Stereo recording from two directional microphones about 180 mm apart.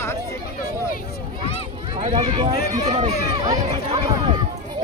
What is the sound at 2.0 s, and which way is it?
Speech, 35° right (ahead or behind).